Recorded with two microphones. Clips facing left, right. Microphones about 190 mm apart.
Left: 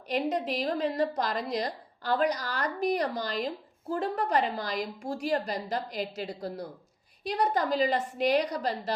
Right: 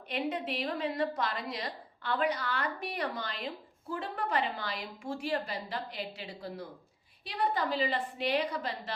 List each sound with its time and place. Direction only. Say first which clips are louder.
0.1 s a woman's voice: left 5 dB; 40° left (ahead or behind)